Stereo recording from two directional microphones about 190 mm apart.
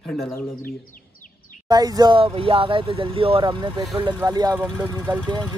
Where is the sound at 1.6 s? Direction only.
20° right (ahead or behind).